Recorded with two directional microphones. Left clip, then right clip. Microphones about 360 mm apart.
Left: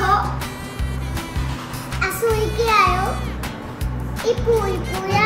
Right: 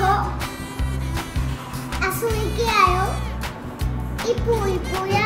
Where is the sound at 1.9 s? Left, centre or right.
Centre.